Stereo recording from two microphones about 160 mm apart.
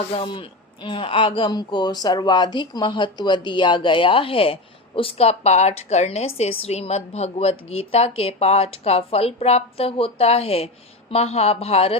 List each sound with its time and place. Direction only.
0.1 s a woman's voice: 35° left (ahead or behind)